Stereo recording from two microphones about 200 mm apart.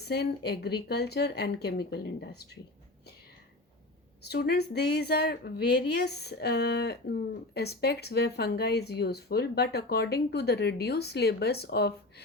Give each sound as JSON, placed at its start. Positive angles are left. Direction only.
{"t": 0.0, "sound": "speech", "side_deg": 55}
{"t": 4.2, "sound": "speech", "side_deg": 55}